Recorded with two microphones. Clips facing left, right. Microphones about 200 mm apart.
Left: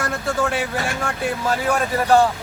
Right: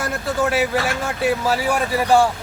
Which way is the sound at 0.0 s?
5° right (ahead or behind).